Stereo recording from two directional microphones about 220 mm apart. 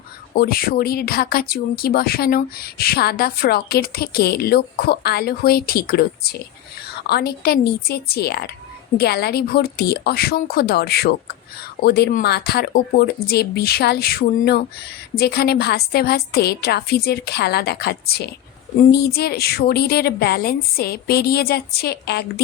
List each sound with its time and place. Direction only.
0.3 s speech: 40° left (ahead or behind)